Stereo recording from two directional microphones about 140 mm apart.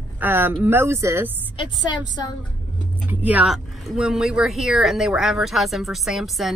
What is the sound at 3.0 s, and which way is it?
Speech, 10° right (ahead or behind).